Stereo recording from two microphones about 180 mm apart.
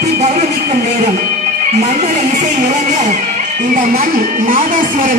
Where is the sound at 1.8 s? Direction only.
40° right (ahead or behind).